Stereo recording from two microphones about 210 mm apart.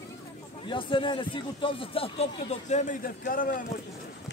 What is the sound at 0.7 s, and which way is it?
Speech, 25° left (ahead or behind).